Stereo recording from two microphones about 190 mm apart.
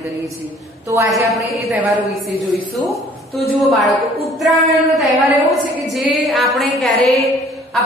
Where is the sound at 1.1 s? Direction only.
Centre (ahead or behind).